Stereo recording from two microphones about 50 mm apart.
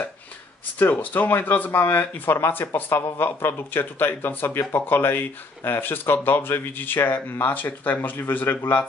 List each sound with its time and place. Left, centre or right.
0.7 s speech: left